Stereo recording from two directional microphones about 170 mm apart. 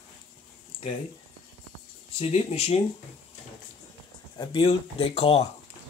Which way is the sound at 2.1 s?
35° left (ahead or behind).